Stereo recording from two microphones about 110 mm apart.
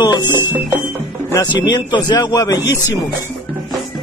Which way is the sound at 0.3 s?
20° right (ahead or behind).